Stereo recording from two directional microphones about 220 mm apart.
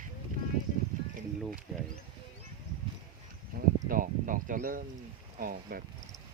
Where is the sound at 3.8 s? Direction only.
40° right (ahead or behind).